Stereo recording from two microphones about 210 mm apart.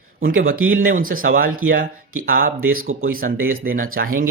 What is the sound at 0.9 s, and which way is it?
Speech, 40° right (ahead or behind).